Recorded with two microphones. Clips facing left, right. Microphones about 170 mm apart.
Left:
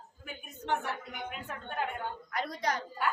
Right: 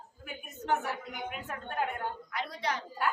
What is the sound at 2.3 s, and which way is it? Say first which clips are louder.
Speech: left 3 dB; 45° left (ahead or behind).